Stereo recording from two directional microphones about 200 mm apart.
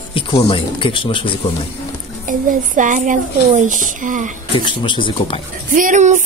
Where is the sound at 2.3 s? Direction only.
40° right (ahead or behind).